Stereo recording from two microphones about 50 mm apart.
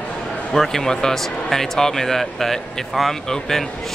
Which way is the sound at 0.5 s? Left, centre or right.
Centre.